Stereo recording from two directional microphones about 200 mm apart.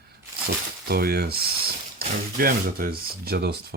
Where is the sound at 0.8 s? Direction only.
50° right (ahead or behind).